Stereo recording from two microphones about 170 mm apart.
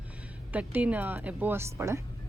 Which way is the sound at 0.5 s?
10° right (ahead or behind).